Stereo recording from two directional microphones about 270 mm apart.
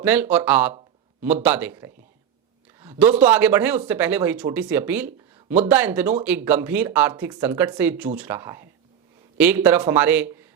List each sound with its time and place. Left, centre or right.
0.0 s a man's voice: centre